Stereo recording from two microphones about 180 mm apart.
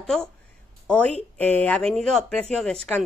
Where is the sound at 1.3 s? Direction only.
10° left (ahead or behind).